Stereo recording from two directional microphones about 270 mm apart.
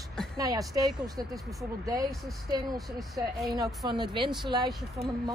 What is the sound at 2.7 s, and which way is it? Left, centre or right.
Speech, centre.